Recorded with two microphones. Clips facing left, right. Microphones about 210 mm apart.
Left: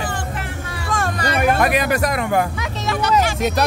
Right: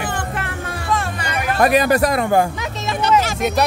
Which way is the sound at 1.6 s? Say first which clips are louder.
Right 3 dB; 35° right (ahead or behind).